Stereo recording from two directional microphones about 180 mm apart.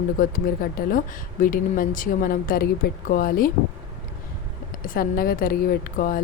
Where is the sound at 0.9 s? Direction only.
50° left (ahead or behind).